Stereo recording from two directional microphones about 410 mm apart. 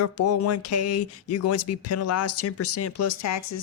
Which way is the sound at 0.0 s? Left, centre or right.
Left.